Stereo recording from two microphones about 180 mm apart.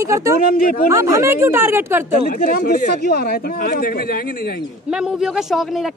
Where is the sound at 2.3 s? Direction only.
55° left (ahead or behind).